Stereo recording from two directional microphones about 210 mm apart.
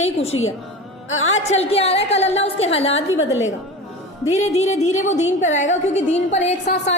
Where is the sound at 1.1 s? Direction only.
75° left (ahead or behind).